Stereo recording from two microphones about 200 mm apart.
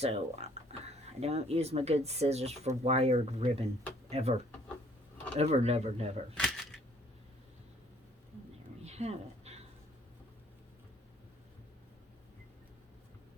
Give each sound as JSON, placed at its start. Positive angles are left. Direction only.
{"t": 0.0, "sound": "speech", "side_deg": -30}
{"t": 5.4, "sound": "speech", "side_deg": -30}
{"t": 6.3, "sound": "camera", "side_deg": 5}
{"t": 8.8, "sound": "a sound", "side_deg": -35}